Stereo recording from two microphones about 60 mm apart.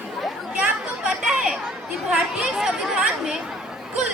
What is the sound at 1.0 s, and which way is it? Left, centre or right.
Chatter, centre.